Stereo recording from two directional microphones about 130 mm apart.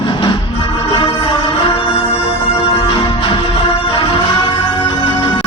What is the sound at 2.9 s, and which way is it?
Music, 35° left (ahead or behind).